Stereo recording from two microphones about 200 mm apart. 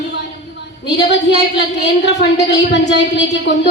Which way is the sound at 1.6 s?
60° left (ahead or behind).